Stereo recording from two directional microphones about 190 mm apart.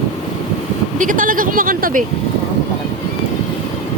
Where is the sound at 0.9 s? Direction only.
45° right (ahead or behind).